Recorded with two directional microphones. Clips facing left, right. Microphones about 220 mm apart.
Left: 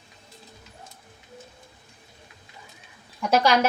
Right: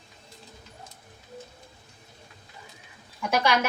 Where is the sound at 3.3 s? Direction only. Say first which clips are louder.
Left 4 dB; 35° left (ahead or behind).